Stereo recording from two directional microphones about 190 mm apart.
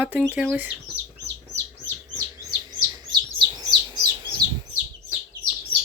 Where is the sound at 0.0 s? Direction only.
10° right (ahead or behind).